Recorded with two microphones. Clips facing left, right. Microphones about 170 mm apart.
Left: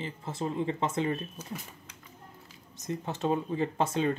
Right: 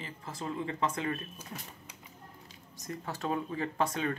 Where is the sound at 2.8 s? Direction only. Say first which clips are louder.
Left 5 dB; 20° left (ahead or behind).